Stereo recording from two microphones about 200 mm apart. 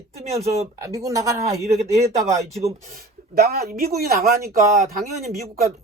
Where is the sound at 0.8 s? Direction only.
15° right (ahead or behind).